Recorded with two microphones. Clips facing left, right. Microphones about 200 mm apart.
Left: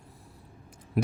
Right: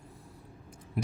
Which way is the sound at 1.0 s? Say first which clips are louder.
Left 6 dB; 75° left (ahead or behind).